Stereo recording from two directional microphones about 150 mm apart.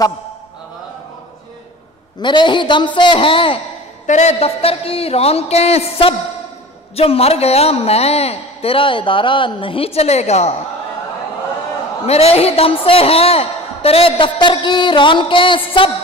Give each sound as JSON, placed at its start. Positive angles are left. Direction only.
{"t": 2.2, "sound": "a man's voice", "side_deg": 30}
{"t": 4.0, "sound": "a woman's voice", "side_deg": 50}
{"t": 12.1, "sound": "a man's voice", "side_deg": 45}